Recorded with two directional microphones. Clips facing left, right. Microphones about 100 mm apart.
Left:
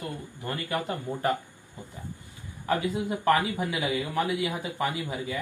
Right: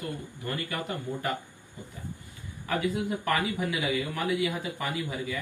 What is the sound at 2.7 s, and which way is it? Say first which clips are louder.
Speech: left 1 dB; 25° left (ahead or behind).